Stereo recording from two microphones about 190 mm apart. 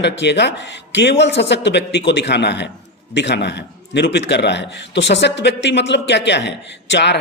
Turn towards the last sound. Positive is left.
turn(degrees=65)  # may be behind; listen again after turning